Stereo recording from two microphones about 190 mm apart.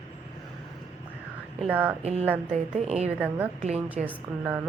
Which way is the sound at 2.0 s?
35° right (ahead or behind).